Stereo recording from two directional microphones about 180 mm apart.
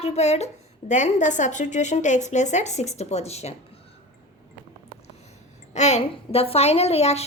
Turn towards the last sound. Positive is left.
turn(degrees=35)  # may be behind; listen again after turning